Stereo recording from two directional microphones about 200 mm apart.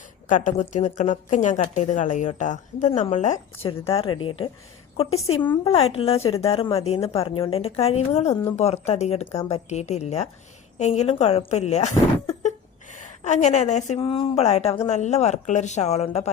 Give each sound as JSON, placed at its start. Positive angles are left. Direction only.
{"t": 0.3, "sound": "a woman's voice", "side_deg": 40}